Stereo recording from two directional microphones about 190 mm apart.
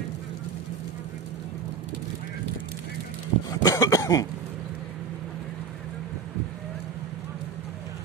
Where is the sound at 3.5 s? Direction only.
20° left (ahead or behind).